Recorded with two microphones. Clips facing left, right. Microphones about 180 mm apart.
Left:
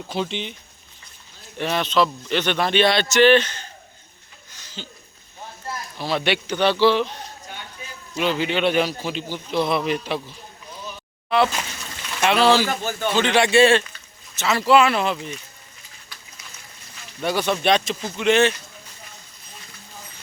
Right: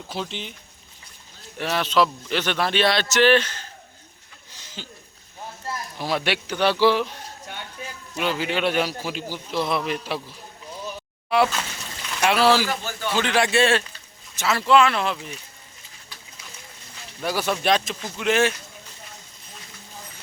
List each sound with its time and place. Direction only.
0.1 s a man's voice: centre (ahead or behind)
1.5 s a man's voice: 5° right (ahead or behind)
4.8 s speech: 10° right (ahead or behind)
6.0 s a man's voice: 10° right (ahead or behind)
8.1 s a man's voice: 5° right (ahead or behind)
12.2 s a man's voice: 5° right (ahead or behind)
12.8 s speech: 45° left (ahead or behind)
13.1 s a man's voice: centre (ahead or behind)
14.4 s speech: 15° right (ahead or behind)
14.7 s a man's voice: 5° left (ahead or behind)
17.2 s a man's voice: 5° right (ahead or behind)